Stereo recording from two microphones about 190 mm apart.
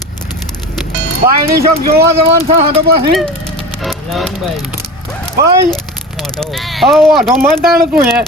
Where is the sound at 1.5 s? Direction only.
55° right (ahead or behind).